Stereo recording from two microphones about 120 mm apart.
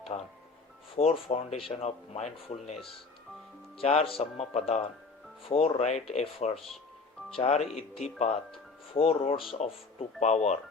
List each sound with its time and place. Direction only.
0.1 s speech: 45° left (ahead or behind)
0.9 s speech: 60° left (ahead or behind)
2.7 s speech: centre (ahead or behind)
3.8 s speech: 55° left (ahead or behind)
4.2 s speech: 65° left (ahead or behind)
5.5 s speech: 55° left (ahead or behind)
9.5 s speech: 65° left (ahead or behind)